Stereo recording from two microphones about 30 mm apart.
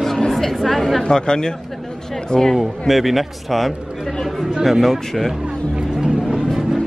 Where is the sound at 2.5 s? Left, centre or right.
Centre.